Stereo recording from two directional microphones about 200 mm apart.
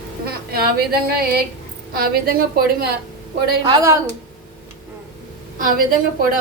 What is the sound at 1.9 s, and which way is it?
Speech, 50° right (ahead or behind).